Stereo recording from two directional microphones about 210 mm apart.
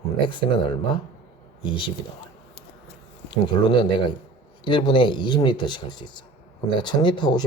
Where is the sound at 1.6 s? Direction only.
25° left (ahead or behind).